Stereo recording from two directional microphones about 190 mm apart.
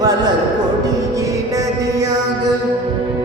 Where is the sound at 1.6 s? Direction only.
20° right (ahead or behind).